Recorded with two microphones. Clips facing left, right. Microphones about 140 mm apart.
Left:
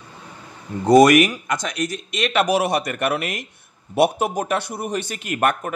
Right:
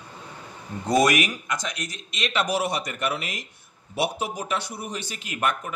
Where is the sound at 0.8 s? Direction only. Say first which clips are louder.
Left 9 dB; 60° left (ahead or behind).